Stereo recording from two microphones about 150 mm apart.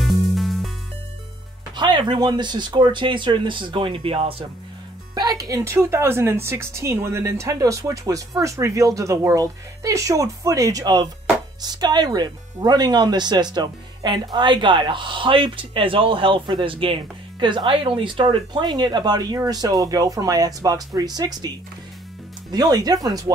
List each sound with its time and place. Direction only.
0.0 s music: centre (ahead or behind)
1.8 s speech: 30° right (ahead or behind)
5.1 s speech: 25° right (ahead or behind)
22.5 s speech: 25° right (ahead or behind)